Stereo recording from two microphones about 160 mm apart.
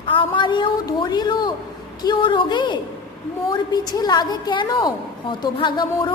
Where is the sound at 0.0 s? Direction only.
30° left (ahead or behind).